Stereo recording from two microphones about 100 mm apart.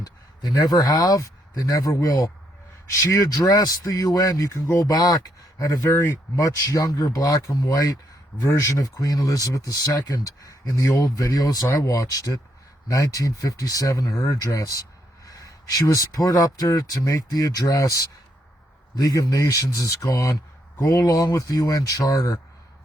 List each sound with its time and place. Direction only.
0.0 s speech: 35° left (ahead or behind)